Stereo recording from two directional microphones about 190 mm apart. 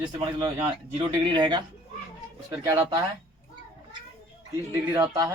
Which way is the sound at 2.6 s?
20° right (ahead or behind).